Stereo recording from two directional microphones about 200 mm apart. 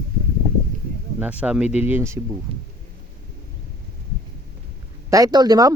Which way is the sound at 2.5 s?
30° right (ahead or behind).